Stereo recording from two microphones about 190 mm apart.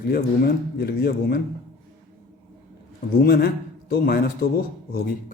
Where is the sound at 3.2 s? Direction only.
55° left (ahead or behind).